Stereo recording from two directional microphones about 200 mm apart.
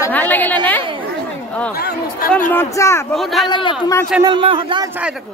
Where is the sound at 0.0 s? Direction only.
10° left (ahead or behind).